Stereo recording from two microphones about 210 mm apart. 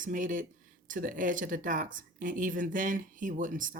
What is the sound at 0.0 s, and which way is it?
Speech, 40° right (ahead or behind).